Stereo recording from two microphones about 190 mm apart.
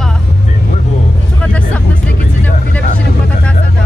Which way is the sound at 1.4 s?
5° left (ahead or behind).